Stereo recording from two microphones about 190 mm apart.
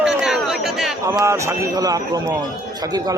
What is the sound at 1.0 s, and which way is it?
Speech, 15° right (ahead or behind).